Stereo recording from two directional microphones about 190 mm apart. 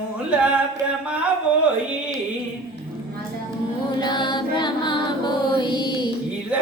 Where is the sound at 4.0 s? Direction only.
25° left (ahead or behind).